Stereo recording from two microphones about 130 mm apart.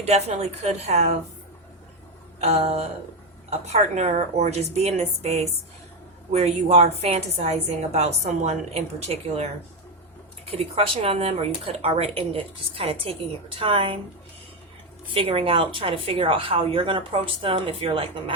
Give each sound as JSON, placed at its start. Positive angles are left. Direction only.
{"t": 0.0, "sound": "a woman's voice", "side_deg": -55}
{"t": 2.4, "sound": "a woman's voice", "side_deg": -55}
{"t": 15.1, "sound": "speech", "side_deg": -45}